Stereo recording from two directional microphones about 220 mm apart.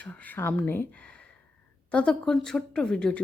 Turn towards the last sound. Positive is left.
turn(degrees=5)  # may be behind; listen again after turning